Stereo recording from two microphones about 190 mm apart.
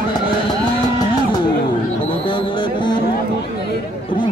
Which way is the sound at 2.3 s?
25° left (ahead or behind).